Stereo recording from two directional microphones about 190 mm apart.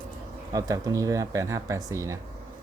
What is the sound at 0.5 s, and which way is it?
Speech, 20° right (ahead or behind).